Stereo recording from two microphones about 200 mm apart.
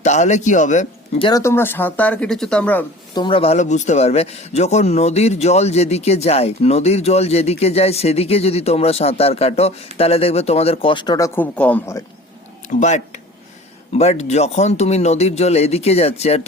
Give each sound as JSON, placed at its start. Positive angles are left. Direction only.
{"t": 0.0, "sound": "speech", "side_deg": 35}
{"t": 1.3, "sound": "speech", "side_deg": 15}
{"t": 3.2, "sound": "speech", "side_deg": 25}
{"t": 11.3, "sound": "speech", "side_deg": 5}
{"t": 12.6, "sound": "speech", "side_deg": 35}